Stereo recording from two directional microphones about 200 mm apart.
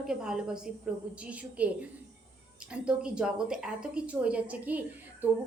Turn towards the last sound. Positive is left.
turn(degrees=-10)  # may be behind; listen again after turning